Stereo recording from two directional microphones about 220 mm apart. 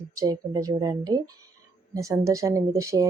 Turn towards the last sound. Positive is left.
turn(degrees=-15)  # may be behind; listen again after turning